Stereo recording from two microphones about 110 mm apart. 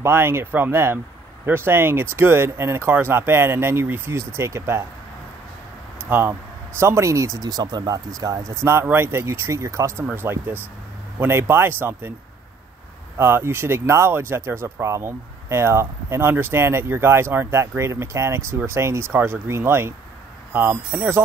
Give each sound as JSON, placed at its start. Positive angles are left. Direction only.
{"t": 0.0, "sound": "speech", "side_deg": -20}
{"t": 6.0, "sound": "speech", "side_deg": -20}
{"t": 13.2, "sound": "speech", "side_deg": -20}